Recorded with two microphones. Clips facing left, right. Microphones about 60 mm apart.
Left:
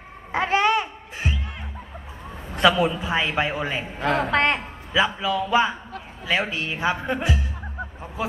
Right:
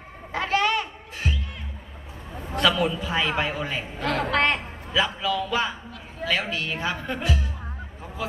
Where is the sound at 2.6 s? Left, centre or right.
Centre.